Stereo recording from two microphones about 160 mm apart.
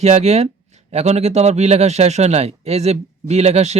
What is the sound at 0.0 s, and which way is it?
Speech, 40° right (ahead or behind).